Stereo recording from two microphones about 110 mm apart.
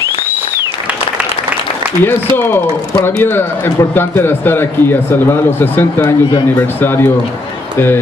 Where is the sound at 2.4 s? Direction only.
20° left (ahead or behind).